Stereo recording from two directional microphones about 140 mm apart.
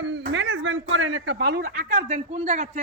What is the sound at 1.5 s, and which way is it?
Speech, 80° right.